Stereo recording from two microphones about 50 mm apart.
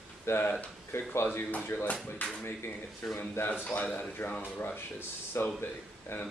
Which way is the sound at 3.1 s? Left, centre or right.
Left.